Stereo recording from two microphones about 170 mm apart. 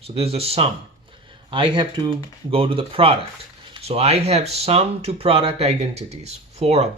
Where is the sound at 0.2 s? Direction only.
35° right (ahead or behind).